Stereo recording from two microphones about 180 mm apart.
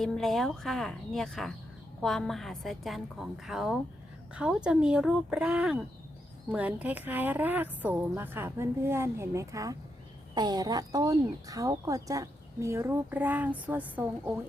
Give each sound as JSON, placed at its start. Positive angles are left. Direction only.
{"t": 0.0, "sound": "a woman's voice", "side_deg": 0}